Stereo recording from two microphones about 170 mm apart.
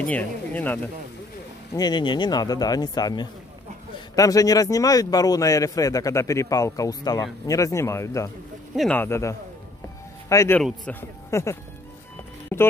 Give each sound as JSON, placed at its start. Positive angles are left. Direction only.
{"t": 0.0, "sound": "a man's voice", "side_deg": 10}
{"t": 1.8, "sound": "a man's voice", "side_deg": 25}
{"t": 8.7, "sound": "a man's voice", "side_deg": 5}